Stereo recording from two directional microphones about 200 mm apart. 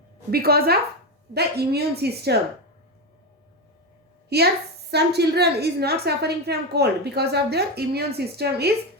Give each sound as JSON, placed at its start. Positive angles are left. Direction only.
{"t": 0.3, "sound": "a woman's voice", "side_deg": -50}
{"t": 4.3, "sound": "a woman's voice", "side_deg": -55}